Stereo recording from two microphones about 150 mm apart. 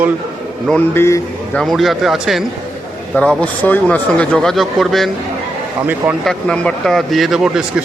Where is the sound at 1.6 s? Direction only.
Centre (ahead or behind).